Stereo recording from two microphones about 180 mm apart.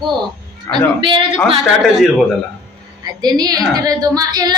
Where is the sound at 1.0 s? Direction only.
25° right (ahead or behind).